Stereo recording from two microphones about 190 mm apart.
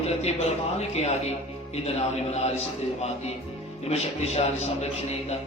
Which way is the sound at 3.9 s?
35° left (ahead or behind).